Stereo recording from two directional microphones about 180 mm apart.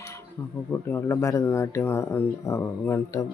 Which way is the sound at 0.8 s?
10° left (ahead or behind).